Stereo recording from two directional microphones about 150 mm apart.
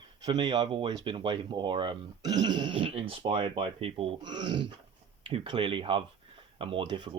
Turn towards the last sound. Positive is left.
turn(degrees=-30)  # may be behind; listen again after turning